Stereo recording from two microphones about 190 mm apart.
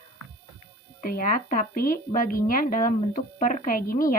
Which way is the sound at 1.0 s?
45° left (ahead or behind).